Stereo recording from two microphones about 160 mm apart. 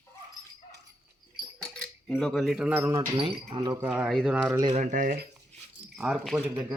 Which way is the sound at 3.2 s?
35° right (ahead or behind).